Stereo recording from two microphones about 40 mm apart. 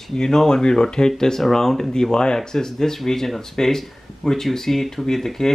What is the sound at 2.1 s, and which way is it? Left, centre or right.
Speech, centre.